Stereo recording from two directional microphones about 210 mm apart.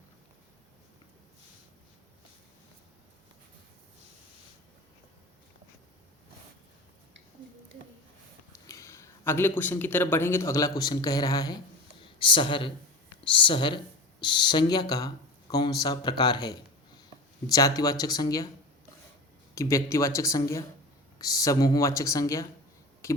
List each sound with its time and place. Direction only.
8.6 s speech: 15° left (ahead or behind)
19.5 s speech: 15° left (ahead or behind)